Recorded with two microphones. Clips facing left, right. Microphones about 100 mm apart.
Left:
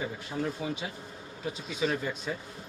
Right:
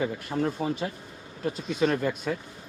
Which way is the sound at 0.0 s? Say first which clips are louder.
Right 5 dB; 55° right (ahead or behind).